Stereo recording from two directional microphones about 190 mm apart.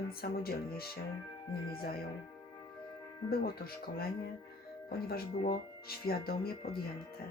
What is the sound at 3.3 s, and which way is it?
Speech, 50° left (ahead or behind).